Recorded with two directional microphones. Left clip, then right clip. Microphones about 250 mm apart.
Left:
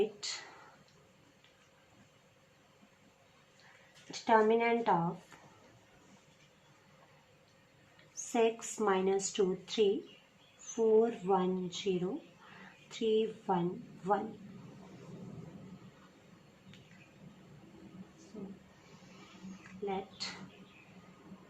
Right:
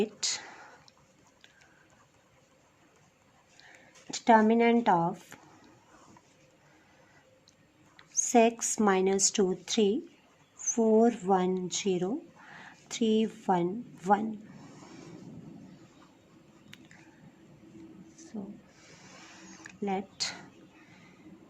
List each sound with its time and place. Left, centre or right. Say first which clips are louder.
0.2 s a woman's voice: right 8 dB; right
4.1 s a woman's voice: right 4 dB; right
5.3 s a sound: right 5 dB; right
8.1 s a woman's voice: right 7 dB; right
19.8 s speech: right 5 dB; right